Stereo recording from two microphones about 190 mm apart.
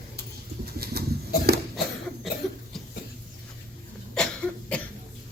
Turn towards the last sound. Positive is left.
turn(degrees=5)  # may be behind; listen again after turning